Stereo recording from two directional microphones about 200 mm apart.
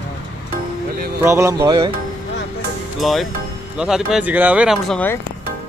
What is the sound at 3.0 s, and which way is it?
Speech, centre (ahead or behind).